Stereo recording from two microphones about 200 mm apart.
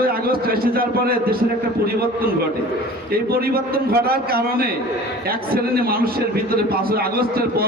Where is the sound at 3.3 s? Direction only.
50° right (ahead or behind).